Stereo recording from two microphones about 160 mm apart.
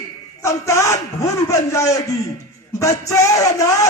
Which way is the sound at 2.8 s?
20° left (ahead or behind).